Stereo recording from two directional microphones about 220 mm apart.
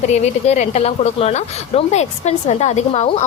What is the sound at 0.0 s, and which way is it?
A woman's voice, 30° left (ahead or behind).